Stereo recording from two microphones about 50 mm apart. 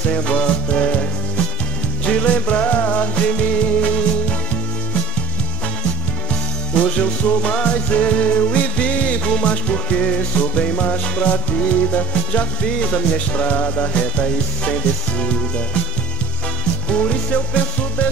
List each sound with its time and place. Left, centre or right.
0.4 s music: centre
2.0 s music: left
6.7 s music: left
16.9 s music: left